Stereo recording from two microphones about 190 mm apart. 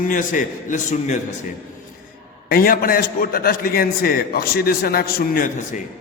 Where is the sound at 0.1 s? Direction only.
45° left (ahead or behind).